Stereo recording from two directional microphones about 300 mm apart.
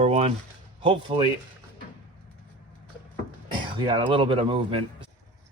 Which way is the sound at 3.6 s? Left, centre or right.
Centre.